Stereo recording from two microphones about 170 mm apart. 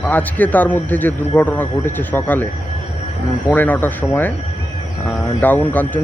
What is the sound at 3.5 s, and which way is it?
Speech, 10° left (ahead or behind).